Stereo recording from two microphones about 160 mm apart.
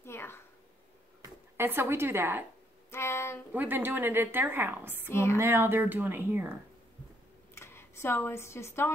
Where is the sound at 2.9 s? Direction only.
15° left (ahead or behind).